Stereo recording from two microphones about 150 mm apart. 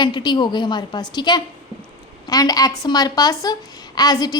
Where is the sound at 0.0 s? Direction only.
30° left (ahead or behind).